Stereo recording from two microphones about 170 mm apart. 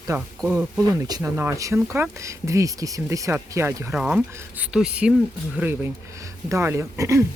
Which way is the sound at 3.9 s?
5° right (ahead or behind).